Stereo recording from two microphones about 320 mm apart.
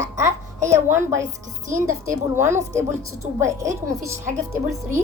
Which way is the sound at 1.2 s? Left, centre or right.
Right.